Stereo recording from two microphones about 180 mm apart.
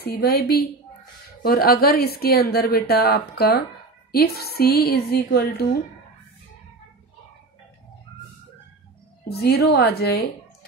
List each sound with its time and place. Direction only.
0.0 s speech: 60° left (ahead or behind)
9.3 s speech: 60° left (ahead or behind)